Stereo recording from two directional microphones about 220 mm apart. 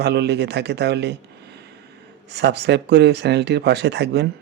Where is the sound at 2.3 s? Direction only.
50° right (ahead or behind).